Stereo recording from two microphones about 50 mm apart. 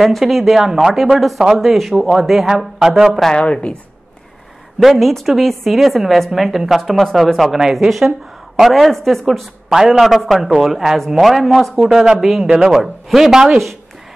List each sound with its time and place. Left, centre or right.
0.0 s a man's voice: centre
3.3 s a woman's voice: centre
4.8 s a man's voice: centre
9.7 s a man's voice: centre